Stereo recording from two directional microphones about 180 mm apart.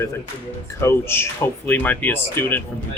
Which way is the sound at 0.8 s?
15° left (ahead or behind).